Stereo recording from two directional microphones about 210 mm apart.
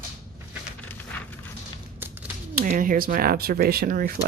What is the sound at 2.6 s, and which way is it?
Speech, 40° right (ahead or behind).